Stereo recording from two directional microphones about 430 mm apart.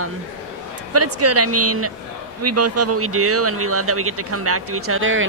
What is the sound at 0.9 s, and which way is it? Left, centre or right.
Speech, right.